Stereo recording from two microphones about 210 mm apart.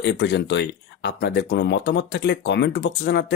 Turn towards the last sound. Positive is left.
turn(degrees=55)  # may be behind; listen again after turning